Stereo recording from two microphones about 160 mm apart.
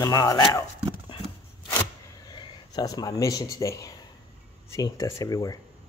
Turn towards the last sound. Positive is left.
turn(degrees=20)  # may be behind; listen again after turning